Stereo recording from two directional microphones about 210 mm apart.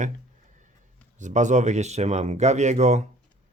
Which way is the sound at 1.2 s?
35° right (ahead or behind).